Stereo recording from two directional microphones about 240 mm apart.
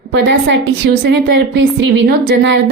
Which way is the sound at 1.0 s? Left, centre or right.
Right.